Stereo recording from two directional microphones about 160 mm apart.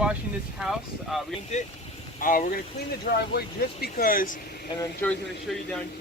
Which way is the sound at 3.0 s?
75° left (ahead or behind).